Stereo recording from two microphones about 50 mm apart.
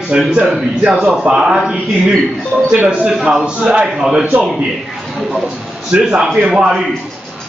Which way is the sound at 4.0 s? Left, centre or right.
Centre.